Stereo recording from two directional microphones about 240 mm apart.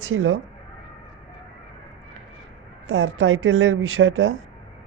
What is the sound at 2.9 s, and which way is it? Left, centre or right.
Speech, right.